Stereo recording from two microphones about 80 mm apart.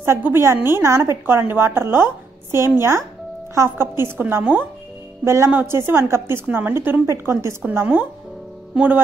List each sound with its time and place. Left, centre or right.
0.0 s a woman's voice: right
5.2 s a woman's voice: right
7.1 s a woman's voice: right
7.6 s a woman's voice: right